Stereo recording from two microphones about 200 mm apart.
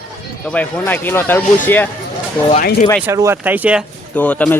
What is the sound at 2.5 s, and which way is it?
Speech, 40° left (ahead or behind).